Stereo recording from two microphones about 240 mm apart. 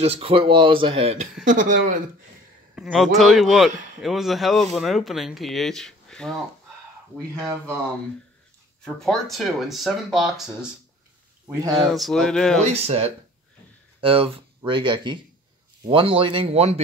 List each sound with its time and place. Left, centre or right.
0.0 s speech: right
2.7 s a man's voice: centre
8.8 s a man's voice: centre
11.9 s a man's voice: centre
12.6 s speech: right